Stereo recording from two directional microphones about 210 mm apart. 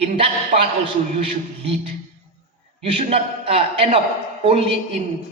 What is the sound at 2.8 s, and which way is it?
A man's voice, 30° right (ahead or behind).